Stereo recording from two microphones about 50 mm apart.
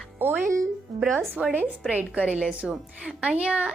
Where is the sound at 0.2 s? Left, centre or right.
Right.